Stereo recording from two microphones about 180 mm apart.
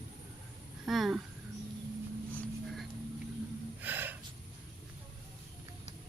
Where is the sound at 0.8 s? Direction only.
Centre (ahead or behind).